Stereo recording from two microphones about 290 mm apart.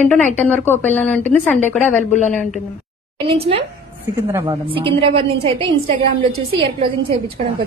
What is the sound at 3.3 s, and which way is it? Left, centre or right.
A woman's voice, centre.